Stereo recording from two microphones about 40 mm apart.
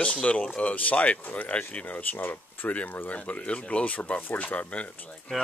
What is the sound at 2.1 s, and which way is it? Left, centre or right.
Speech, left.